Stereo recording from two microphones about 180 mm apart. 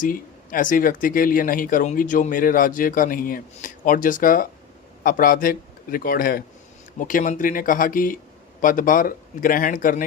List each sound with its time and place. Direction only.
0.0 s speech: 50° left (ahead or behind)